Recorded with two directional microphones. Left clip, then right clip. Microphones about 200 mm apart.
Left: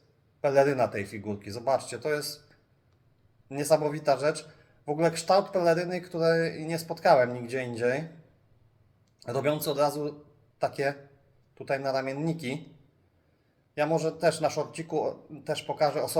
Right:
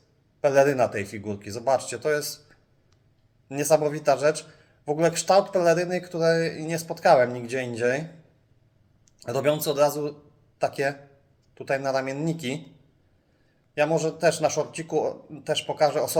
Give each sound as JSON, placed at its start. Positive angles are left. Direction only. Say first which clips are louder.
{"t": 0.4, "sound": "speech", "louder": "right 4 dB", "side_deg": -15}
{"t": 3.5, "sound": "speech", "louder": "right 3 dB", "side_deg": -15}
{"t": 9.2, "sound": "speech", "louder": "right 4 dB", "side_deg": -15}
{"t": 13.7, "sound": "speech", "louder": "right 4 dB", "side_deg": -15}